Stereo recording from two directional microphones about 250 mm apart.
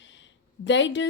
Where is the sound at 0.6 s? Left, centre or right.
Left.